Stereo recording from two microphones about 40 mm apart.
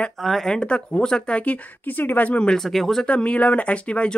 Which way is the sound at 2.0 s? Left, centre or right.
Left.